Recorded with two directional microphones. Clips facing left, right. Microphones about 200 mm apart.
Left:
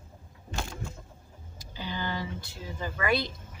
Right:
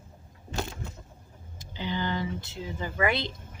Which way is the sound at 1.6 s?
20° right (ahead or behind).